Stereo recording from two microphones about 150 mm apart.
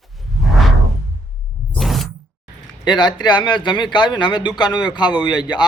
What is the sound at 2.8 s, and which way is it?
A man's voice, 30° left (ahead or behind).